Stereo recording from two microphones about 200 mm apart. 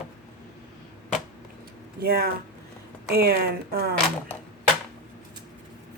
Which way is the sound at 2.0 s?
50° right (ahead or behind).